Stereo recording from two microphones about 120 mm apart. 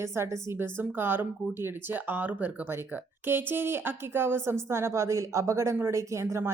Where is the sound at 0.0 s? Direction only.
20° right (ahead or behind).